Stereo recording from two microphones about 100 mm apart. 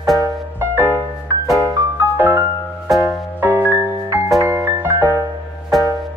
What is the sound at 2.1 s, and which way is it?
Music, 20° right (ahead or behind).